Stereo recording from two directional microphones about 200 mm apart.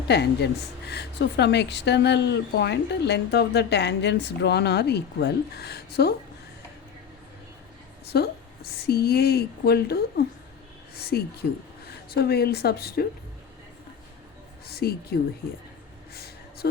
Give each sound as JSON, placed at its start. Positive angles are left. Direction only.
{"t": 0.1, "sound": "a woman's voice", "side_deg": 55}
{"t": 8.1, "sound": "a woman's voice", "side_deg": 55}
{"t": 14.7, "sound": "speech", "side_deg": 50}
{"t": 16.1, "sound": "a sound", "side_deg": 50}